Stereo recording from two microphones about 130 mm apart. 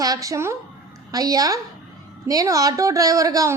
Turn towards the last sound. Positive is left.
turn(degrees=-25)  # may be behind; listen again after turning